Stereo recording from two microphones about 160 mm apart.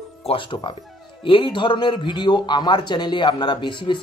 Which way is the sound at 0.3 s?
30° left (ahead or behind).